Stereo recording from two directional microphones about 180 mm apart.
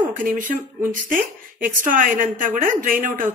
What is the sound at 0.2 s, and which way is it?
A woman's voice, 45° right (ahead or behind).